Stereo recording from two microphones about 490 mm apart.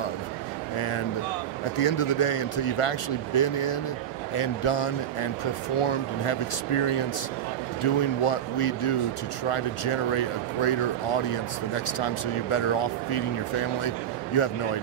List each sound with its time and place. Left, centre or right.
0.7 s speech: left
7.8 s speech: left